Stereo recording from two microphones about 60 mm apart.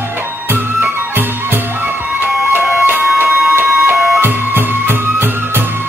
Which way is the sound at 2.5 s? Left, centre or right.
Right.